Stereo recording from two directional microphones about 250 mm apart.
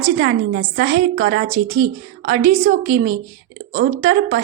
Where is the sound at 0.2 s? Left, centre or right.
Right.